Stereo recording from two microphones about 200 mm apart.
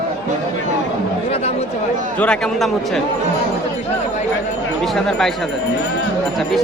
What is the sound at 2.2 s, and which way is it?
Speech, 5° left (ahead or behind).